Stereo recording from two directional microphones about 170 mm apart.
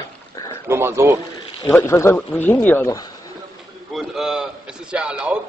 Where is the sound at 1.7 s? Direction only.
15° left (ahead or behind).